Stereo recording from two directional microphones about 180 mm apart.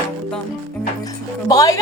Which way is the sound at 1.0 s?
20° left (ahead or behind).